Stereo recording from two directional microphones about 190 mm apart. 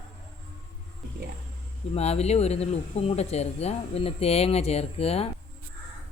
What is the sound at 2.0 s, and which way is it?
Speech, 35° left (ahead or behind).